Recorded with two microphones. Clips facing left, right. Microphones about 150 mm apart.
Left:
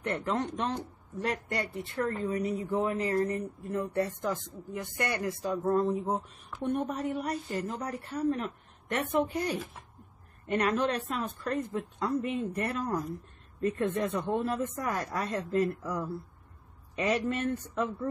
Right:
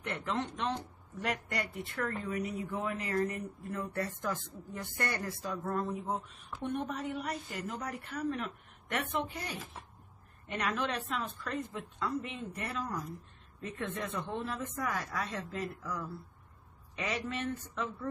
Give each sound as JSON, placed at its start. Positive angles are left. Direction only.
{"t": 0.0, "sound": "a woman's voice", "side_deg": 40}
{"t": 3.7, "sound": "a man's voice", "side_deg": 20}
{"t": 6.6, "sound": "a woman's voice", "side_deg": 40}
{"t": 16.9, "sound": "speech", "side_deg": 45}